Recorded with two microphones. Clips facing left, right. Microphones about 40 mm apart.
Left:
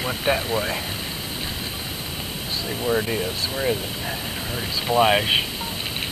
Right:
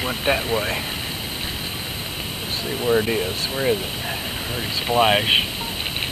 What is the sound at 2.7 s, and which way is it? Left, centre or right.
Speech, centre.